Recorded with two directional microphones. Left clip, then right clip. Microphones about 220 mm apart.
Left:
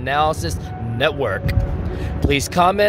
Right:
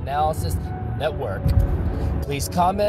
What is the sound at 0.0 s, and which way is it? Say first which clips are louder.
Speech: left 4 dB; 40° left (ahead or behind).